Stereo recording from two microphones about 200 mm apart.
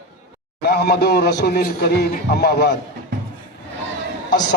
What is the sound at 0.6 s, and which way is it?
A man's voice, 55° left (ahead or behind).